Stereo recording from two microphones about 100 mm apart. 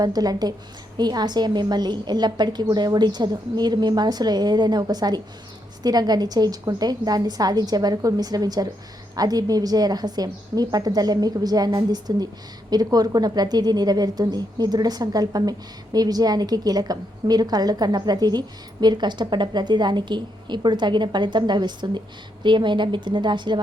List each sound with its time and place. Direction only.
0.0 s a woman's voice: 40° right (ahead or behind)